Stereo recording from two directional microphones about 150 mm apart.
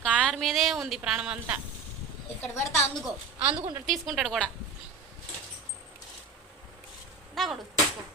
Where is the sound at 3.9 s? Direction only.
Centre (ahead or behind).